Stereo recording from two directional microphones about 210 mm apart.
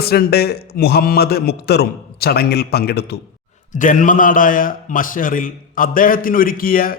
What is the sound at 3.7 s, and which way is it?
A man's voice, 40° left (ahead or behind).